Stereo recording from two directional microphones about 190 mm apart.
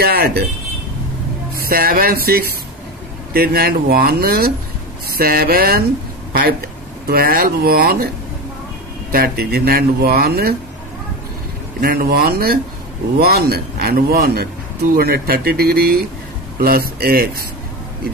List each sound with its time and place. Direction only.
0.0 s speech: 55° right (ahead or behind)
1.6 s a man's voice: 50° right (ahead or behind)
7.1 s a man's voice: 55° right (ahead or behind)
9.1 s speech: 55° right (ahead or behind)
11.8 s a man's voice: 55° right (ahead or behind)